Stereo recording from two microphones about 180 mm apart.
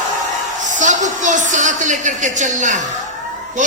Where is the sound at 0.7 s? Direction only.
45° right (ahead or behind).